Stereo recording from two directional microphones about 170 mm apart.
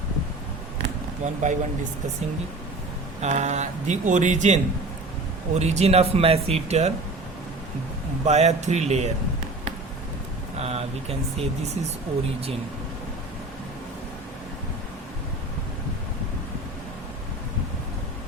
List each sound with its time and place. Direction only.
0.8 s a sound: 45° right (ahead or behind)
3.2 s speech: 40° right (ahead or behind)
8.2 s speech: 40° right (ahead or behind)
10.6 s speech: 35° right (ahead or behind)